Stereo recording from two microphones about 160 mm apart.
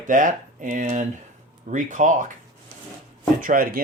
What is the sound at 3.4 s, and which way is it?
Speech, 60° right (ahead or behind).